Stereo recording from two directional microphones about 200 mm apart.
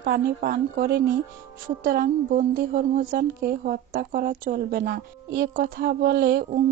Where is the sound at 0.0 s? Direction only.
45° right (ahead or behind).